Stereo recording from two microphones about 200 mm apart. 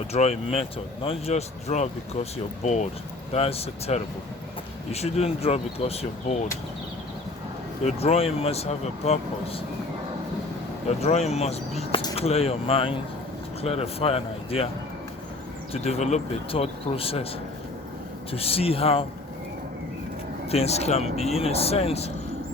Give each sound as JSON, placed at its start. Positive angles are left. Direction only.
{"t": 0.1, "sound": "speech", "side_deg": 30}
{"t": 7.9, "sound": "speech", "side_deg": 30}
{"t": 10.8, "sound": "a man's voice", "side_deg": 30}
{"t": 15.7, "sound": "speech", "side_deg": 30}
{"t": 18.3, "sound": "speech", "side_deg": 30}
{"t": 20.5, "sound": "speech", "side_deg": 30}